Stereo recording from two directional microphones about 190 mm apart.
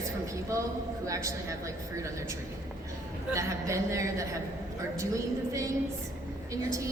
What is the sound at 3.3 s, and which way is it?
A woman's voice, 15° right (ahead or behind).